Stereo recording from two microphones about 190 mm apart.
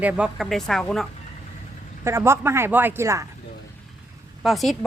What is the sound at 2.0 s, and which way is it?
Speech, 15° right (ahead or behind).